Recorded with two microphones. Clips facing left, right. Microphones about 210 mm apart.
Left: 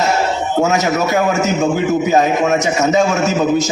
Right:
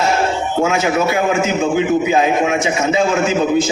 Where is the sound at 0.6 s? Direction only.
40° left (ahead or behind).